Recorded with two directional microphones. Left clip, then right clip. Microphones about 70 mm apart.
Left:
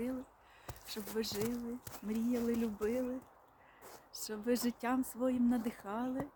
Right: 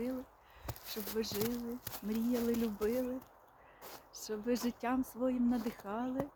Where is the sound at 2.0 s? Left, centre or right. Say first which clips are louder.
Right 1 dB; centre.